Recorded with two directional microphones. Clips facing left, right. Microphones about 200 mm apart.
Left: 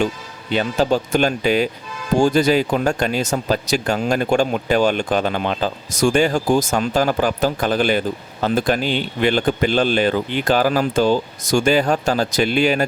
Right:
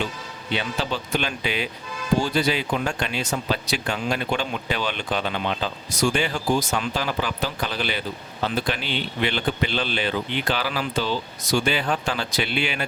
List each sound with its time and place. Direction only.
0.5 s speech: 45° left (ahead or behind)